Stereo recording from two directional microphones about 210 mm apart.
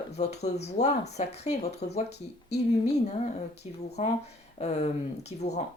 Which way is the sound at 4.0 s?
35° left (ahead or behind).